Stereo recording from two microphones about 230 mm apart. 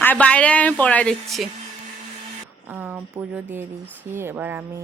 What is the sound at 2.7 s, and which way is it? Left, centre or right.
Speech, centre.